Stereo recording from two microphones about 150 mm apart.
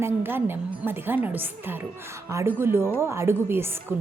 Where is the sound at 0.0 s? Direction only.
15° right (ahead or behind).